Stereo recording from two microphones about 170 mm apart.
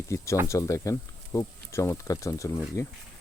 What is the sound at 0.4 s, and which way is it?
Speech, 20° left (ahead or behind).